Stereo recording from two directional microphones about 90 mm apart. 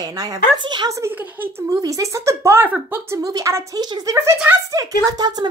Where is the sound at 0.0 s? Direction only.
40° right (ahead or behind).